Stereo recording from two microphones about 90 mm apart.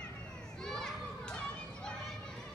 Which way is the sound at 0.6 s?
5° left (ahead or behind).